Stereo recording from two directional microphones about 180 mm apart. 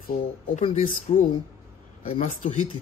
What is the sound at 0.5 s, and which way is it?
Speech, 40° left (ahead or behind).